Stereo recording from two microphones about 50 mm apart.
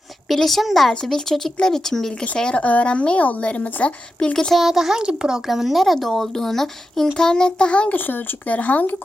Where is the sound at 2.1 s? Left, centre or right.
Left.